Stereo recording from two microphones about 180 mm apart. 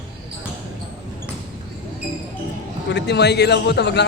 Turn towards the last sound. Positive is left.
turn(degrees=70)  # may be behind; listen again after turning